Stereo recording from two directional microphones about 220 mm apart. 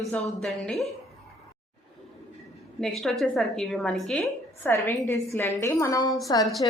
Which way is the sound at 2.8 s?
Centre (ahead or behind).